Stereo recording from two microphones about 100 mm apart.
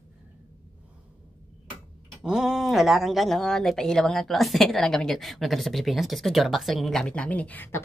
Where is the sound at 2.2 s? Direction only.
5° right (ahead or behind).